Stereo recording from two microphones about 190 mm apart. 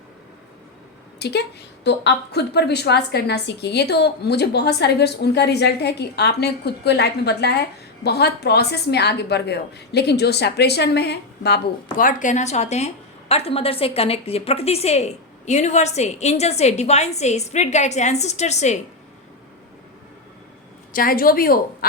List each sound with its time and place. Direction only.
1.2 s a woman's voice: 60° left (ahead or behind); by 18.8 s 35° left (ahead or behind)
20.9 s speech: 50° left (ahead or behind)